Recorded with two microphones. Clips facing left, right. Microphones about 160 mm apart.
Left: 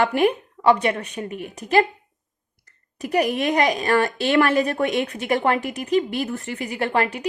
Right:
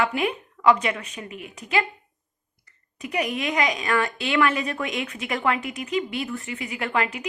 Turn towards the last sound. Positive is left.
turn(degrees=35)  # may be behind; listen again after turning